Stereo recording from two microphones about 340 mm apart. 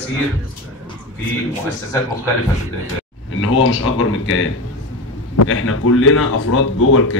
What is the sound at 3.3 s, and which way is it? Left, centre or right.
Speech, left.